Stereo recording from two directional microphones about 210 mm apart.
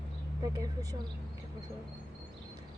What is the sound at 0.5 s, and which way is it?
Speech, 15° right (ahead or behind).